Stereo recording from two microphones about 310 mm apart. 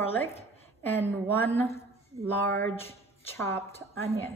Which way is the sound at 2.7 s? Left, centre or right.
Centre.